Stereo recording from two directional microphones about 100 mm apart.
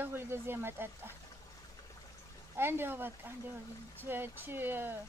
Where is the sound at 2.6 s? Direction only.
20° right (ahead or behind).